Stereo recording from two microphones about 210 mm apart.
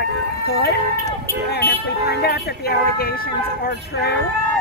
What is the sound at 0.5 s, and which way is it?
Speech, 50° left (ahead or behind).